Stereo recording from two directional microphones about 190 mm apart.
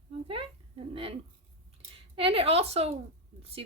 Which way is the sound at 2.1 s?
30° right (ahead or behind).